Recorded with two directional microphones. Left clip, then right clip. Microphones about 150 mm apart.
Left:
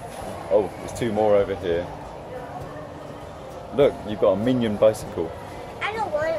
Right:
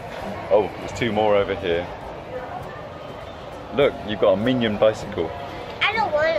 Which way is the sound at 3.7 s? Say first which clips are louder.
Even; 20° left (ahead or behind).